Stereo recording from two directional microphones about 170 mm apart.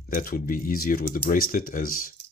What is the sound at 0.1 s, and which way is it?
Speech, 55° left (ahead or behind).